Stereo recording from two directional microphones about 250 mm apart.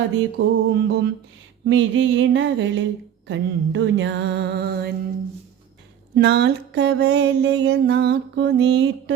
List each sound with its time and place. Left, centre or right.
0.2 s music: right
6.1 s music: right